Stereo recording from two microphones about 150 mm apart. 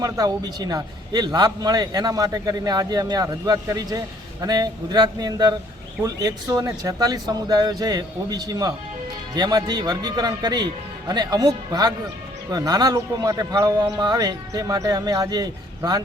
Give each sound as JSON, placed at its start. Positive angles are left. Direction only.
{"t": 0.0, "sound": "a man's voice", "side_deg": -25}